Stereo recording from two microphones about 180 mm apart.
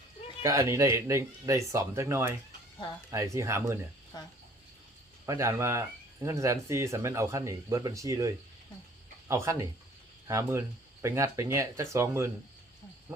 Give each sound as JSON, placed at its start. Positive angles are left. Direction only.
{"t": 0.4, "sound": "speech", "side_deg": -15}
{"t": 5.2, "sound": "speech", "side_deg": -15}
{"t": 9.3, "sound": "speech", "side_deg": -15}